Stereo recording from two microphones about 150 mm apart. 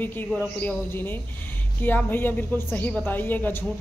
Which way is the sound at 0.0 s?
15° left (ahead or behind).